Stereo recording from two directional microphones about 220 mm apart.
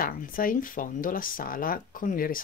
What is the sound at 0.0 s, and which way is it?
Speech, 40° left (ahead or behind).